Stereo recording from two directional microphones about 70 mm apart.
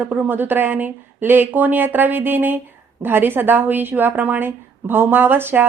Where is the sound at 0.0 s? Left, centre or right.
Right.